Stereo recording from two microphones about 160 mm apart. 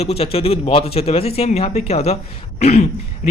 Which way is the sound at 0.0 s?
40° left (ahead or behind).